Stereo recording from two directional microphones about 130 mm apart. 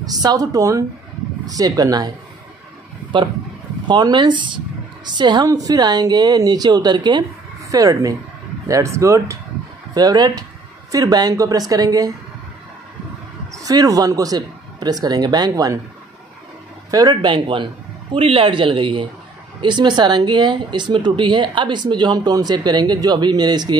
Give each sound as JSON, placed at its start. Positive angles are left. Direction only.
{"t": 0.0, "sound": "a woman's voice", "side_deg": -30}
{"t": 3.8, "sound": "a woman's voice", "side_deg": -35}
{"t": 13.5, "sound": "speech", "side_deg": -25}
{"t": 16.9, "sound": "speech", "side_deg": -35}